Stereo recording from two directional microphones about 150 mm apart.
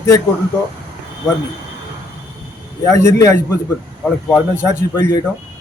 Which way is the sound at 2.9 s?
20° left (ahead or behind).